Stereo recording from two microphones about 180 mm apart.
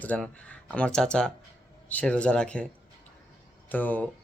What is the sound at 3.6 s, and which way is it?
Speech, 10° left (ahead or behind).